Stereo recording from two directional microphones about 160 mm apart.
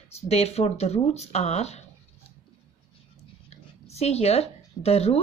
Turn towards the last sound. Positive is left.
turn(degrees=40)  # may be behind; listen again after turning